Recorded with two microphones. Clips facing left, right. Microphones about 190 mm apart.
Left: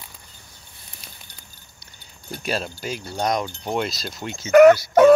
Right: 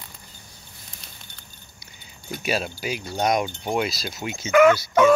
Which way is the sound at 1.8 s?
5° right (ahead or behind).